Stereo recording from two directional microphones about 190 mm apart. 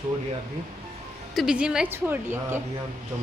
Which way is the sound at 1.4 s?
5° right (ahead or behind).